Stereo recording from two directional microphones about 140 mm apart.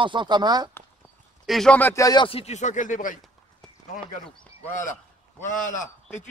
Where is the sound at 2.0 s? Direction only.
35° left (ahead or behind); by 3.2 s 65° left (ahead or behind).